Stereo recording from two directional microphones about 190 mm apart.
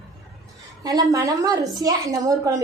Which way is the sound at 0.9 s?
20° right (ahead or behind).